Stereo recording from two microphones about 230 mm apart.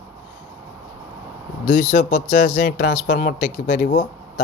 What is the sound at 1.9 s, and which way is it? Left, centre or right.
Speech, left.